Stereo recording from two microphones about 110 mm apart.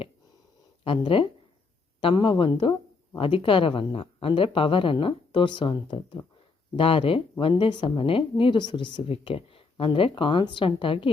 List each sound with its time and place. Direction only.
0.9 s a woman's voice: 55° left (ahead or behind)